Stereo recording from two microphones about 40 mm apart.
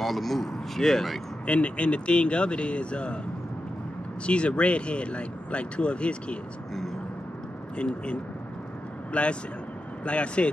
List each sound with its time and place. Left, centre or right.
0.0 s speech: centre
1.4 s speech: left
4.3 s speech: left
7.7 s speech: left